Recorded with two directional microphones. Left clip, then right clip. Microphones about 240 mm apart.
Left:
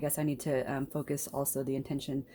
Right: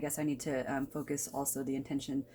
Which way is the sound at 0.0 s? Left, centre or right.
Left.